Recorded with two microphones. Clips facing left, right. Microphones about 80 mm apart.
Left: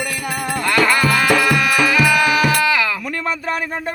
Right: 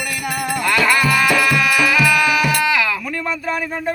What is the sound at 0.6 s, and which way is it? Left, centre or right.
Music, left.